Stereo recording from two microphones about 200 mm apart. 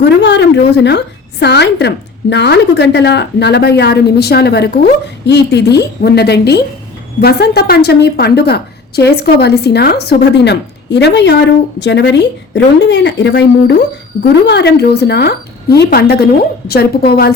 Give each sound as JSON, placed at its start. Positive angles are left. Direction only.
{"t": 0.0, "sound": "a woman's voice", "side_deg": 60}